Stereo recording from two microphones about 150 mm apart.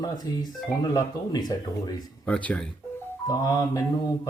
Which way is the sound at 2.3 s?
10° left (ahead or behind).